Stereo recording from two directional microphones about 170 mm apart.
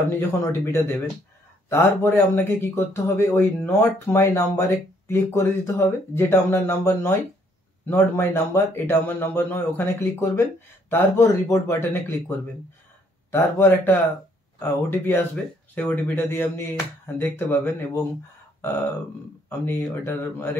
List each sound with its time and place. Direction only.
0.3 s speech: 15° left (ahead or behind)
19.6 s speech: 15° left (ahead or behind)